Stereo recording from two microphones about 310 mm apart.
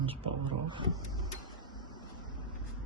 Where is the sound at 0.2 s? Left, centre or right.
Centre.